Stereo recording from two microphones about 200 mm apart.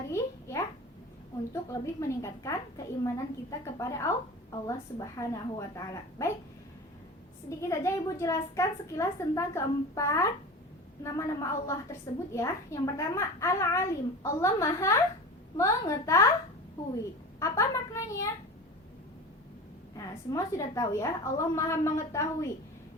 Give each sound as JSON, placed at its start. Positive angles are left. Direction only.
{"t": 0.1, "sound": "a sound", "side_deg": 15}
{"t": 1.7, "sound": "a woman's voice", "side_deg": 15}
{"t": 7.7, "sound": "a woman's voice", "side_deg": 15}
{"t": 17.4, "sound": "a woman's voice", "side_deg": 15}
{"t": 20.3, "sound": "a woman's voice", "side_deg": 15}